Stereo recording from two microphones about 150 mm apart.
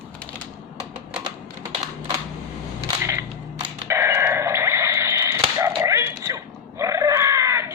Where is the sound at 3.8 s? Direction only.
15° right (ahead or behind).